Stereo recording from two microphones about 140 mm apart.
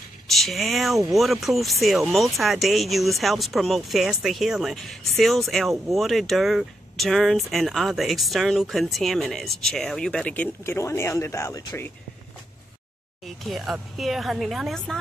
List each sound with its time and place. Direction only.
0.3 s speech: centre (ahead or behind); by 11.9 s 20° left (ahead or behind)
13.2 s speech: centre (ahead or behind)